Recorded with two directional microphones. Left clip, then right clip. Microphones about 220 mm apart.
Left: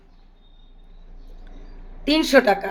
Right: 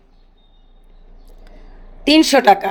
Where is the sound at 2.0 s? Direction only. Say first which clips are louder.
Right 6 dB; 35° right (ahead or behind).